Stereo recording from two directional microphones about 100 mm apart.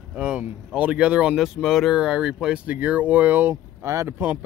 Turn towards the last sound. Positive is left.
turn(degrees=-20)  # may be behind; listen again after turning